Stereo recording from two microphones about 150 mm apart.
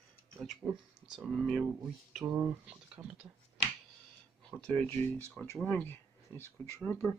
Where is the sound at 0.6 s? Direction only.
25° right (ahead or behind).